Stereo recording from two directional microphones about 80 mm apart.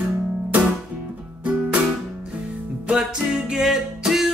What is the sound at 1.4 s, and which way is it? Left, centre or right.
Music, centre.